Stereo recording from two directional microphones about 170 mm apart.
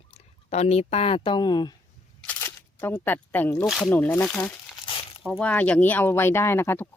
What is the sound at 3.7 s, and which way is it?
Speech, 5° left (ahead or behind).